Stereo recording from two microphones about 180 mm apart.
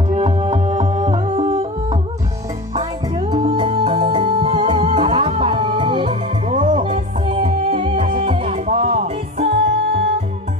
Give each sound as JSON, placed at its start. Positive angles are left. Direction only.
{"t": 0.1, "sound": "music", "side_deg": -35}
{"t": 3.2, "sound": "music", "side_deg": -25}